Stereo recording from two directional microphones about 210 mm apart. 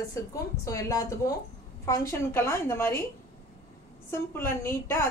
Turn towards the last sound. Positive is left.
turn(degrees=10)  # may be behind; listen again after turning